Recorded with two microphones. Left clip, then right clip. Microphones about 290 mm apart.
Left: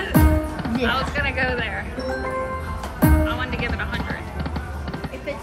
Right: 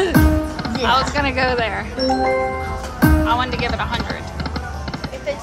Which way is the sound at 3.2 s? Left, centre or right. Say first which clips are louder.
Right 6 dB; centre.